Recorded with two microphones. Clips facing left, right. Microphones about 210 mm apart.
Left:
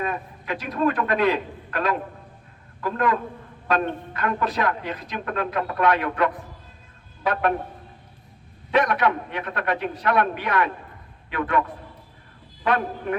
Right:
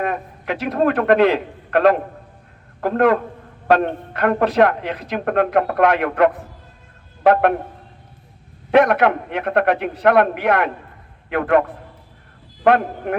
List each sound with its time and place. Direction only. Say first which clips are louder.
0.0 s a sound: right 5 dB; 65° right (ahead or behind)
0.8 s speech: right 7 dB; 65° right (ahead or behind)
8.7 s a man's voice: right 7 dB; 65° right (ahead or behind)
12.6 s a man's voice: right 7 dB; 60° right (ahead or behind)